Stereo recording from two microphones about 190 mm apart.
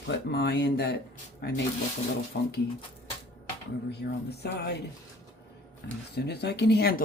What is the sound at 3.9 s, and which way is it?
Speech, 60° left (ahead or behind).